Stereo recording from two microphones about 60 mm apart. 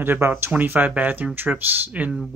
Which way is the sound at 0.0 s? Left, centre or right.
Right.